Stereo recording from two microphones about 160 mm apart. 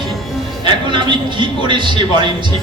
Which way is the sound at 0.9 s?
30° right (ahead or behind).